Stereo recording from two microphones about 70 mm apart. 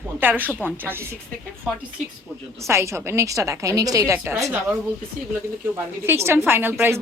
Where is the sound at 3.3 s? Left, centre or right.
Right.